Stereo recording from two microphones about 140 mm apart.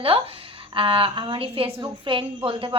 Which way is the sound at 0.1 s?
40° right (ahead or behind).